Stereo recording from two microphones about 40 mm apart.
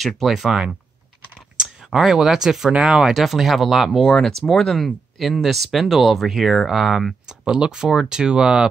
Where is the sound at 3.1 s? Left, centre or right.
Centre.